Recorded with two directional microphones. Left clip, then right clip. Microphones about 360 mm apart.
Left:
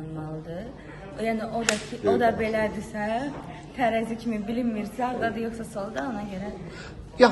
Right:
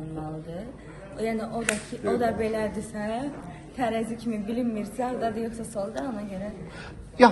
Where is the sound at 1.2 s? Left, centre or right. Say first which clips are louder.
Left 2 dB; centre.